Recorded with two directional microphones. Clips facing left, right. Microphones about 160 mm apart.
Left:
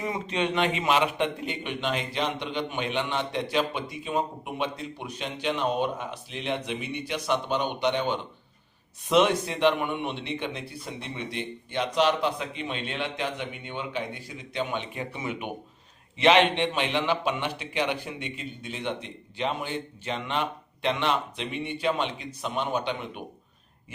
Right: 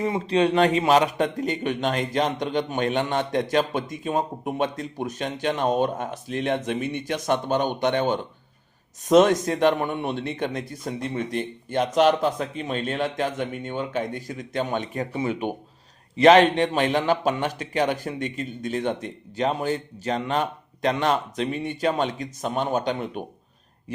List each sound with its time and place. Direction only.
0.0 s a man's voice: 35° right (ahead or behind)